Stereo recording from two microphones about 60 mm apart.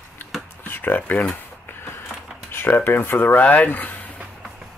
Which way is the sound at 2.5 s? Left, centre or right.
Left.